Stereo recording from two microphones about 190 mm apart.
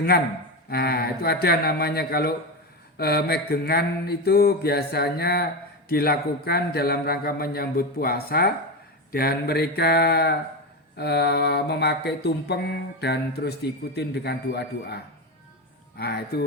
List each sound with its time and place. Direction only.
0.7 s mantra: 55° left (ahead or behind)
5.9 s a man's voice: 55° left (ahead or behind)
9.1 s mantra: 55° left (ahead or behind)